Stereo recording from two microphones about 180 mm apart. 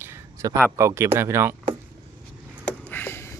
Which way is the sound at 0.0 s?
15° right (ahead or behind).